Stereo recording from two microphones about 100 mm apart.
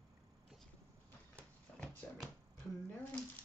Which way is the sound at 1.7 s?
10° left (ahead or behind).